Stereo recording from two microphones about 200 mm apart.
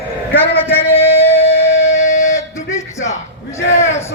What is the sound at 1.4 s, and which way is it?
Music, 30° left (ahead or behind).